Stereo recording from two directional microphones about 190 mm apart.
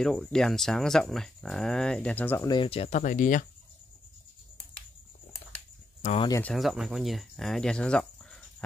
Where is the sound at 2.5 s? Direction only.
30° left (ahead or behind); by 3.4 s 45° left (ahead or behind).